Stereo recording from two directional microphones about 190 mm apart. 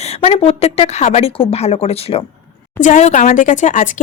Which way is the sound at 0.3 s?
30° left (ahead or behind).